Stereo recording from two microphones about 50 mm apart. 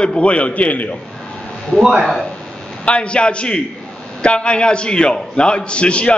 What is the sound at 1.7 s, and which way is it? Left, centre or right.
Speech, centre.